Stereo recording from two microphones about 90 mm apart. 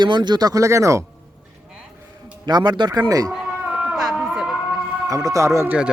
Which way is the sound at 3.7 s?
5° right (ahead or behind).